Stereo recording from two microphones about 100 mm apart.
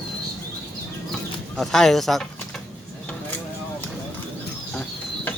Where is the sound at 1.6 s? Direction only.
5° left (ahead or behind).